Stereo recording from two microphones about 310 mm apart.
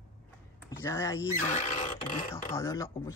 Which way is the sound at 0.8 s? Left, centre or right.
Centre.